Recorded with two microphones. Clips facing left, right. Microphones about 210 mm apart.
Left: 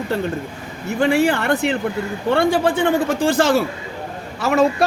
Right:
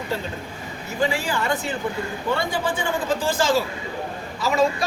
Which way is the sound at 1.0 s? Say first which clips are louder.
Left 7 dB; 60° left (ahead or behind).